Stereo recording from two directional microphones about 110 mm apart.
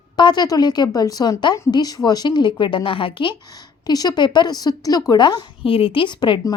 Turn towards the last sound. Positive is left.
turn(degrees=45)  # may be behind; listen again after turning